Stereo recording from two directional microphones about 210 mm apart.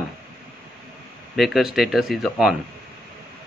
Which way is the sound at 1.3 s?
Centre (ahead or behind).